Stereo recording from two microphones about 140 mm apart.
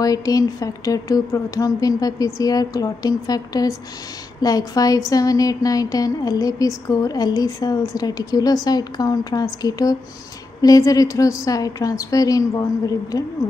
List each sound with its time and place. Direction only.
0.0 s a woman's voice: 25° left (ahead or behind)